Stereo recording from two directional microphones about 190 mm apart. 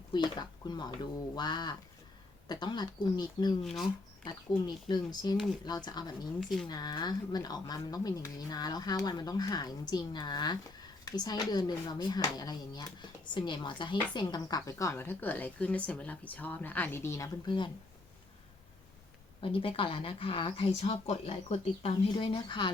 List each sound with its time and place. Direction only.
0.1 s speech: 25° left (ahead or behind)
3.6 s speech: centre (ahead or behind)
4.6 s speech: 20° left (ahead or behind)
6.4 s speech: centre (ahead or behind)
6.7 s speech: 20° left (ahead or behind)
19.4 s speech: 30° left (ahead or behind)